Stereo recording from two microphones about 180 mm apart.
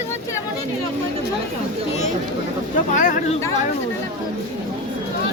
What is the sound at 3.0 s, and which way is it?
Speech, 40° left (ahead or behind).